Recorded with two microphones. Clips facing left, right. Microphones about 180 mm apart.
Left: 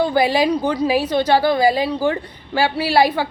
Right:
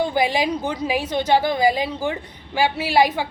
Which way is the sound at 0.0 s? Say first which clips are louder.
Left 4 dB; 15° right (ahead or behind).